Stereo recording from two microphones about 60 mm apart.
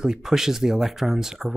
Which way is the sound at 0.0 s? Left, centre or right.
Centre.